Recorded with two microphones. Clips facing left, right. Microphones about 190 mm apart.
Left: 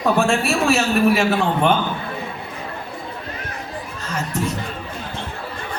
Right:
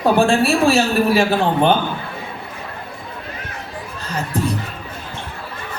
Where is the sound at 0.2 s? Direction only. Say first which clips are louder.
Right 4 dB; 35° right (ahead or behind).